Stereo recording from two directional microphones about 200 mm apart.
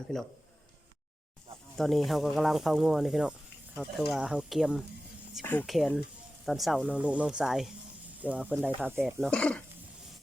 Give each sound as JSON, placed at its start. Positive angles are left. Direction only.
{"t": 0.1, "sound": "speech", "side_deg": 0}
{"t": 1.7, "sound": "speech", "side_deg": 0}
{"t": 5.4, "sound": "speech", "side_deg": 10}
{"t": 9.2, "sound": "speech", "side_deg": 5}